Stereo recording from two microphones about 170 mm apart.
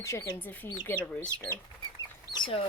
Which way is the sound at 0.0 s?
15° left (ahead or behind).